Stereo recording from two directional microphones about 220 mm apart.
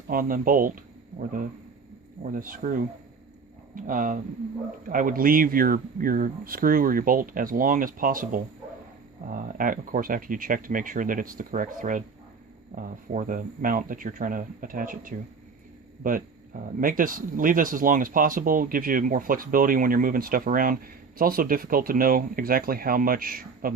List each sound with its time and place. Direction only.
0.1 s speech: 40° right (ahead or behind)
2.3 s speech: 40° right (ahead or behind)
3.8 s speech: 40° right (ahead or behind)